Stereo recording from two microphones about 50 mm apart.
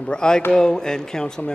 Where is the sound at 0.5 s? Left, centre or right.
Centre.